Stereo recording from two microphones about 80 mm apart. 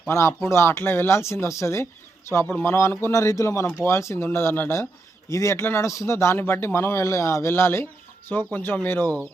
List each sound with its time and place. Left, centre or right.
0.1 s speech: left
5.3 s speech: left